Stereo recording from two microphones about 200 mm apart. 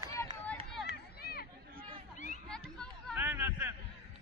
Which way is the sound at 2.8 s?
5° left (ahead or behind).